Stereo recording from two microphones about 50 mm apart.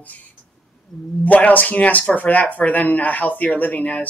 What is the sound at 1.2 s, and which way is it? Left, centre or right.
Speech, left.